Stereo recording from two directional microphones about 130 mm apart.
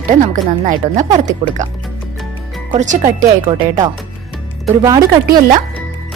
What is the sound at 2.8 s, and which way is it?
Speech, 70° right (ahead or behind).